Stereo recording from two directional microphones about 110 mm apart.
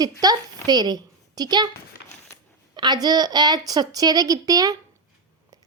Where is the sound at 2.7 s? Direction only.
40° right (ahead or behind).